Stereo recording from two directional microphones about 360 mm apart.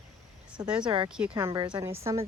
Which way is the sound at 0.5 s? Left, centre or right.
Centre.